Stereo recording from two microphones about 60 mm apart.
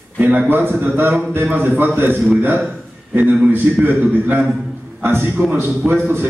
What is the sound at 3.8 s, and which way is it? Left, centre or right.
A man's voice, right.